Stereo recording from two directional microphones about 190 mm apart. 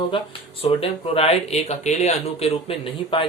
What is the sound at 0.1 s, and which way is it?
Speech, 30° left (ahead or behind).